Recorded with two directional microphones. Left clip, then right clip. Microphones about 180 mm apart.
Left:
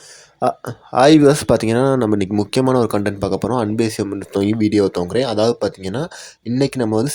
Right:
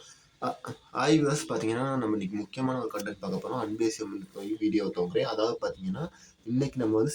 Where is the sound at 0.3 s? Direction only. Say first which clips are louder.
Left 14 dB; 45° left (ahead or behind).